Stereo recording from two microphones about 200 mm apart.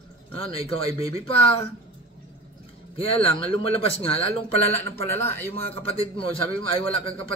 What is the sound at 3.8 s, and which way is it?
Speech, 30° left (ahead or behind).